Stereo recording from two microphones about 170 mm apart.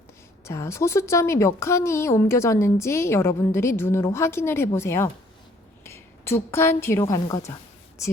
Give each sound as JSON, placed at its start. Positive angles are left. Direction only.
{"t": 0.4, "sound": "a woman's voice", "side_deg": 15}